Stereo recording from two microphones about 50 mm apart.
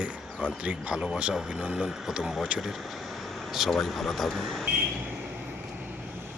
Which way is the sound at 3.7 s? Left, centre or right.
Centre.